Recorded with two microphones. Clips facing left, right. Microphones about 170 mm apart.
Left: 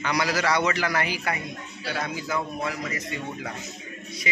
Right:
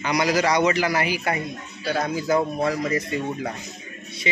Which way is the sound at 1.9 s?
40° right (ahead or behind).